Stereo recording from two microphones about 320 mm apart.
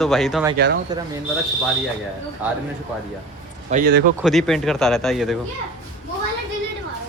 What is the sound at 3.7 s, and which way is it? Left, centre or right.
Speech, right.